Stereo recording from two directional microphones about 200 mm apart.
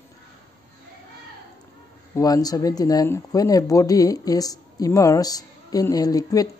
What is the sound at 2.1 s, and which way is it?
A woman's voice, 20° left (ahead or behind).